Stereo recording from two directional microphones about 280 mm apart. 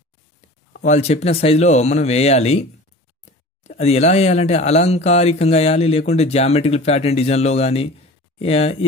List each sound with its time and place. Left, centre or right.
0.7 s speech: left
3.6 s speech: left